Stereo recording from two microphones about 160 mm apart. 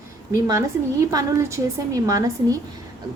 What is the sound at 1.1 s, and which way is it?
A woman's voice, 20° right (ahead or behind).